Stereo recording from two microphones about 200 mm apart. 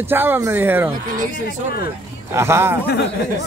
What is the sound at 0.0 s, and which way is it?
Speech, 10° right (ahead or behind).